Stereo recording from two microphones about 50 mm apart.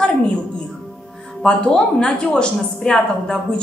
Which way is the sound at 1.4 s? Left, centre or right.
Centre.